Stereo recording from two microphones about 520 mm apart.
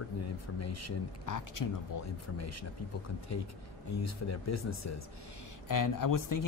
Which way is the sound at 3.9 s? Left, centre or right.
Left.